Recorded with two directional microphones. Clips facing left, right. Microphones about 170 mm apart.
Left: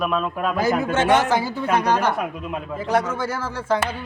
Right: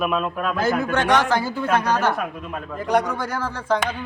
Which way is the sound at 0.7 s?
20° left (ahead or behind).